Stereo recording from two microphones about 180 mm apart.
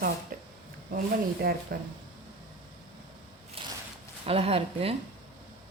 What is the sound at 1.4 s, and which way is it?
Speech, 55° right (ahead or behind).